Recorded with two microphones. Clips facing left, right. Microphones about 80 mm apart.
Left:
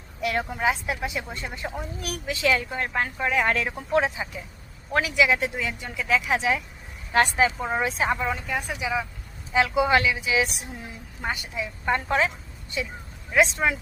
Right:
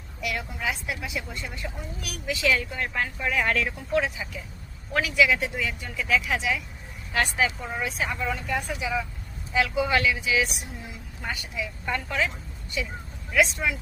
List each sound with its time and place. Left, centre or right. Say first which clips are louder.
0.2 s a woman's voice: left 6 dB; left
3.8 s a woman's voice: left 3 dB; left
8.2 s speech: left 1 dB; centre
9.6 s a woman's voice: left 3 dB; centre
13.3 s speech: left 2 dB; left